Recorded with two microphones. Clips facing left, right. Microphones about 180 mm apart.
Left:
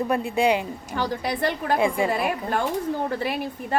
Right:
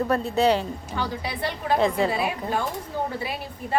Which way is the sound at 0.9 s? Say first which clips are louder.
Left 4 dB; 45° left (ahead or behind).